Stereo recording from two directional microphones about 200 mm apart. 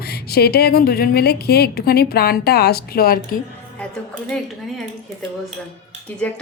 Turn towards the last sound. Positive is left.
turn(degrees=5)  # may be behind; listen again after turning